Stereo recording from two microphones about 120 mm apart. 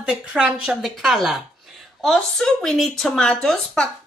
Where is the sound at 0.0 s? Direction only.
10° right (ahead or behind).